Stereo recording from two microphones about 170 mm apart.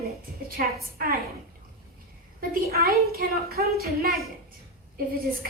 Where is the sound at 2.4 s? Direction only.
65° right (ahead or behind).